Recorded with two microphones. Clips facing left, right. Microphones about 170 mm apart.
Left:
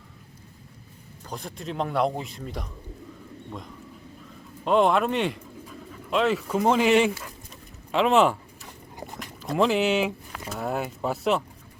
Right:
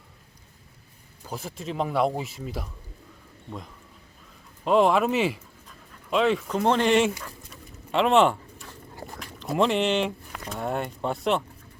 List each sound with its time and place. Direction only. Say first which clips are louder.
1.3 s speech: right 1 dB; 5° right (ahead or behind)
7.2 s dog: even; centre (ahead or behind)
8.6 s a sound: left 1 dB; 15° left (ahead or behind)
9.1 s speech: even; centre (ahead or behind)